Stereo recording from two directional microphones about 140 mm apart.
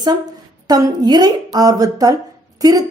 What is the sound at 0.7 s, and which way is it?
A woman's voice, 30° right (ahead or behind).